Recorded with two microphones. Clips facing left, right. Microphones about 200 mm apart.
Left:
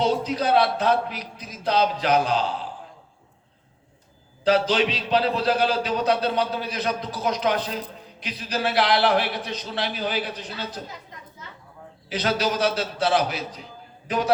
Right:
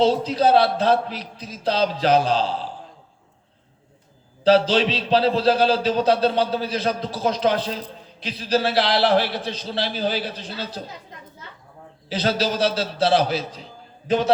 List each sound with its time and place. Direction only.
0.0 s a man's voice: 30° right (ahead or behind)
4.4 s a man's voice: 30° right (ahead or behind)
12.0 s a man's voice: 30° right (ahead or behind)